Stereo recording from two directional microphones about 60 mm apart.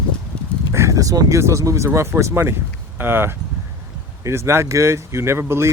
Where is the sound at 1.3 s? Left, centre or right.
Right.